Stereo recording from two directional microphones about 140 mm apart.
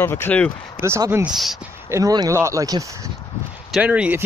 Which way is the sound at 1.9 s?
25° right (ahead or behind).